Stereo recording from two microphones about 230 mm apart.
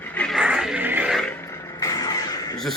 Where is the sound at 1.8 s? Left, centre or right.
Centre.